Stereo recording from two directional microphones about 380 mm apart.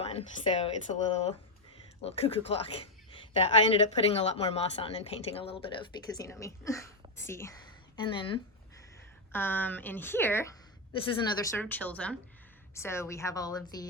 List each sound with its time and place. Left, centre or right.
0.0 s a woman's voice: centre